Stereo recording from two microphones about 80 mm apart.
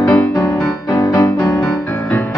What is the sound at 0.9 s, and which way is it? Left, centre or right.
Music, left.